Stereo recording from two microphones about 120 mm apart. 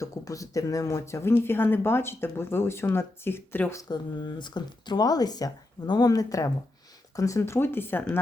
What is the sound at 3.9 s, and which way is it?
Speech, 35° left (ahead or behind).